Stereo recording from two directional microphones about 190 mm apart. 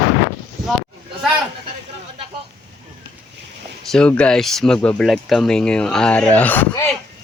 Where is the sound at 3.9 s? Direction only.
5° left (ahead or behind).